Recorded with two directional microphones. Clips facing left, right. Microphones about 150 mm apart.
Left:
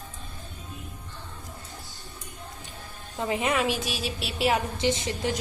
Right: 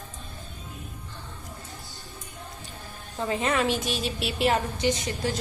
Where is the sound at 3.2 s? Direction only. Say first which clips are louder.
Even; 15° left (ahead or behind).